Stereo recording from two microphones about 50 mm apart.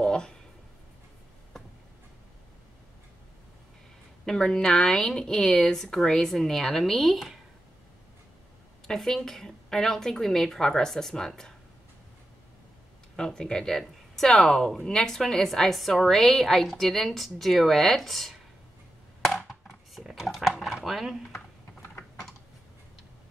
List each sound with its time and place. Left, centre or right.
0.0 s a sound: centre
4.3 s a woman's voice: centre
8.8 s a woman's voice: centre
13.1 s a woman's voice: centre
19.9 s a sound: centre
20.7 s speech: centre